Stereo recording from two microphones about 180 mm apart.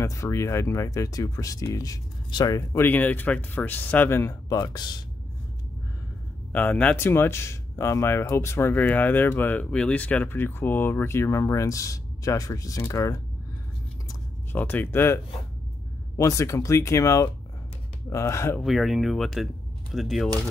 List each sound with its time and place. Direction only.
0.0 s speech: 15° left (ahead or behind)
6.5 s speech: 10° left (ahead or behind)
14.5 s speech: 10° left (ahead or behind)
16.2 s speech: 15° left (ahead or behind)
18.6 s speech: centre (ahead or behind)